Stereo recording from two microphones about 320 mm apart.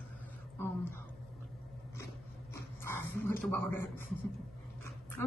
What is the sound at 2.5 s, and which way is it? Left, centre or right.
Dog, centre.